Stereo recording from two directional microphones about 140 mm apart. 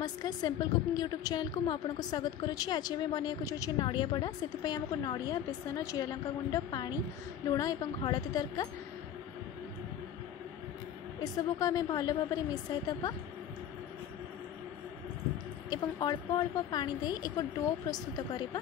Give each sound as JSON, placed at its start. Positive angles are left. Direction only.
{"t": 0.0, "sound": "a woman's voice", "side_deg": 30}
{"t": 11.3, "sound": "a woman's voice", "side_deg": 25}
{"t": 15.7, "sound": "a woman's voice", "side_deg": 30}